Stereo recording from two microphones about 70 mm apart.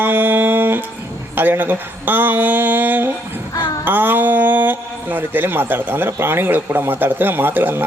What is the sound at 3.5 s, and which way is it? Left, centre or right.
Speech, left.